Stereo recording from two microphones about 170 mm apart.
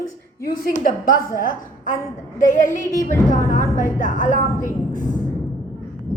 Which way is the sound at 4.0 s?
50° left (ahead or behind).